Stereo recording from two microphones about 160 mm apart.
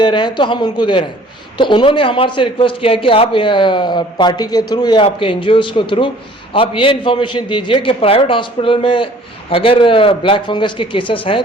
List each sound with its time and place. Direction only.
0.0 s a man's voice: 30° left (ahead or behind)